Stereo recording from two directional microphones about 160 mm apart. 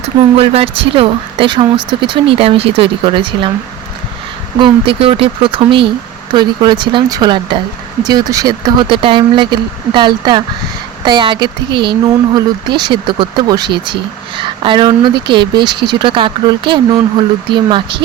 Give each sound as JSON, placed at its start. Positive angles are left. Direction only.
{"t": 0.0, "sound": "speech", "side_deg": -40}
{"t": 4.6, "sound": "speech", "side_deg": -35}